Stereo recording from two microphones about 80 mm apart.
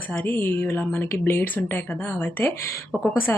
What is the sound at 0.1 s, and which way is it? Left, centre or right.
Speech, left.